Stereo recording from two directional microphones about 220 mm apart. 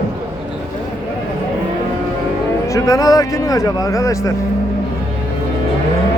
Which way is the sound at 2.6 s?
15° left (ahead or behind).